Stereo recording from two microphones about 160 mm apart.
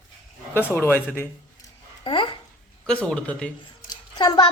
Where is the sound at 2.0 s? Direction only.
30° left (ahead or behind).